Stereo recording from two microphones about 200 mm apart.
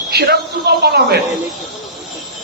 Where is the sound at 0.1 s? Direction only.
55° right (ahead or behind).